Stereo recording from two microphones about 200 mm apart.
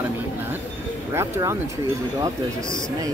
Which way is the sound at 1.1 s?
15° right (ahead or behind).